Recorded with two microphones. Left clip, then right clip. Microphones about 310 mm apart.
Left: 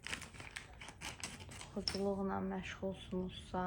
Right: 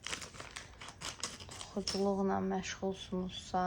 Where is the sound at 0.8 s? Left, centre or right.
Right.